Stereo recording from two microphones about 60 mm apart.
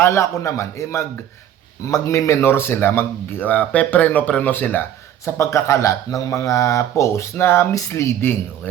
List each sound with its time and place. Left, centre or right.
0.0 s speech: left
3.4 s speech: left
5.2 s speech: left
7.3 s speech: left